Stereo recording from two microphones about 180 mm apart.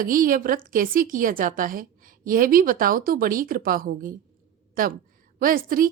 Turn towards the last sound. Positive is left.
turn(degrees=-50)  # may be behind; listen again after turning